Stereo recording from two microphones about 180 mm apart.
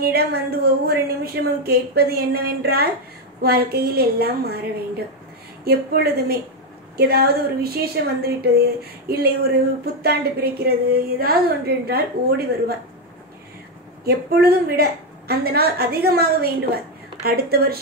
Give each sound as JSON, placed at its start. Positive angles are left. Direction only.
{"t": 0.0, "sound": "a woman's voice", "side_deg": -60}
{"t": 14.0, "sound": "a woman's voice", "side_deg": -60}